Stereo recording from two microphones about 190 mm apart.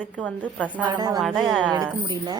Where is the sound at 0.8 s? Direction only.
20° right (ahead or behind).